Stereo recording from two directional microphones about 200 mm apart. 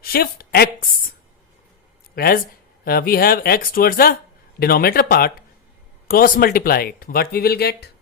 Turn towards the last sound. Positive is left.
turn(degrees=50)  # may be behind; listen again after turning